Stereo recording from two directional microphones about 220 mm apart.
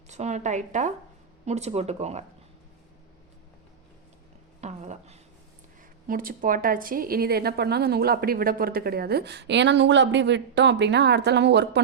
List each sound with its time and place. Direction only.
0.1 s speech: 30° right (ahead or behind)
4.6 s a woman's voice: 30° right (ahead or behind); by 11.8 s 50° right (ahead or behind)